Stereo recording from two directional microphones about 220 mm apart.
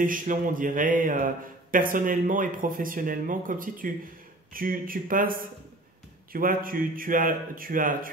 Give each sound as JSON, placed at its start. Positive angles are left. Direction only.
{"t": 0.0, "sound": "speech", "side_deg": -35}